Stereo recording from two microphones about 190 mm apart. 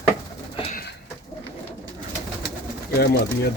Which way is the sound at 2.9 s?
55° left (ahead or behind).